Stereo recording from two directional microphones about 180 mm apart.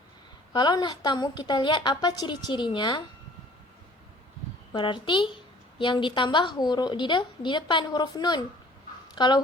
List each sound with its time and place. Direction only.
0.5 s a woman's voice: 25° left (ahead or behind)
4.7 s a woman's voice: 25° left (ahead or behind)